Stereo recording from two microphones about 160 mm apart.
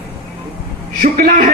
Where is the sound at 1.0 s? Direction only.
55° right (ahead or behind).